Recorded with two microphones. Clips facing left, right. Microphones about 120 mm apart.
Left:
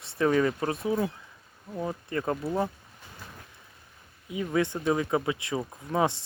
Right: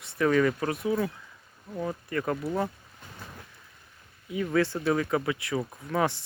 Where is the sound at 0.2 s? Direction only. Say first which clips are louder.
Right 1 dB; 25° left (ahead or behind).